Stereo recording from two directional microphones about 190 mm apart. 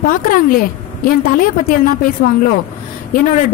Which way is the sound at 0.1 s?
50° left (ahead or behind).